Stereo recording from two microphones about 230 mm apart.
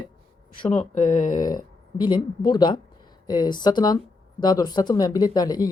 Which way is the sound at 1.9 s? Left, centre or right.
Centre.